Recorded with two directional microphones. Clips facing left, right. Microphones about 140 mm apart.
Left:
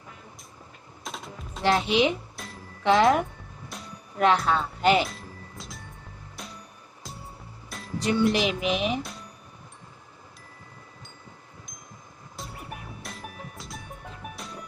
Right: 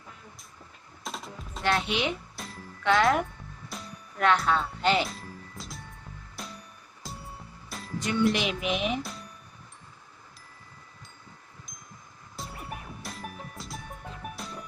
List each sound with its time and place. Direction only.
1.0 s music: centre (ahead or behind)
1.6 s a child's voice: 30° left (ahead or behind)
2.3 s music: centre (ahead or behind)
2.8 s a child's voice: 25° left (ahead or behind)
3.7 s music: centre (ahead or behind)
4.2 s a child's voice: 25° left (ahead or behind)
4.8 s speech: 10° left (ahead or behind)
5.0 s music: centre (ahead or behind)
7.9 s speech: 35° left (ahead or behind)
9.0 s a sound: centre (ahead or behind)
12.4 s music: centre (ahead or behind)